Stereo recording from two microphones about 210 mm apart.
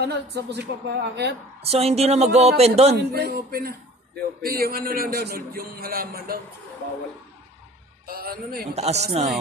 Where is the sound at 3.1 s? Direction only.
45° right (ahead or behind).